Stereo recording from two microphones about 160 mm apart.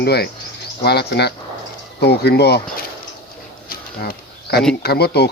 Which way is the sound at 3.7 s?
70° left (ahead or behind).